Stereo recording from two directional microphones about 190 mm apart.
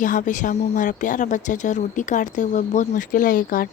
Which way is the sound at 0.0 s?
45° left (ahead or behind).